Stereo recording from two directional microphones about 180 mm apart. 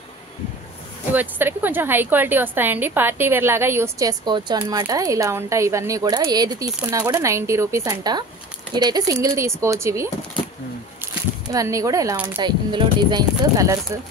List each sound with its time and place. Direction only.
1.1 s a woman's voice: 10° right (ahead or behind)
11.5 s speech: 20° right (ahead or behind)